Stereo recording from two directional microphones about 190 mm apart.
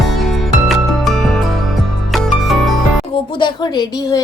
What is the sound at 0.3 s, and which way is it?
Music, centre (ahead or behind).